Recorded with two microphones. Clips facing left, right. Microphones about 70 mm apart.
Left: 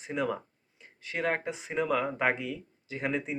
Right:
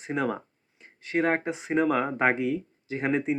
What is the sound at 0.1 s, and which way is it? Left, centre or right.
Speech, right.